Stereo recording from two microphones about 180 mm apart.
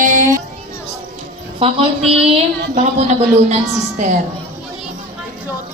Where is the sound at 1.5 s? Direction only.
30° right (ahead or behind).